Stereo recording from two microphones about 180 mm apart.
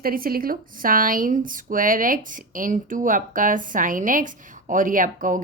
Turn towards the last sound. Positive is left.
turn(degrees=-50)  # may be behind; listen again after turning